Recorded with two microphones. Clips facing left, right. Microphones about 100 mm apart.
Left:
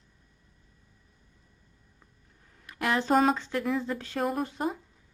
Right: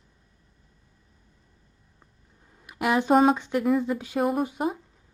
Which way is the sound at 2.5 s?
20° right (ahead or behind).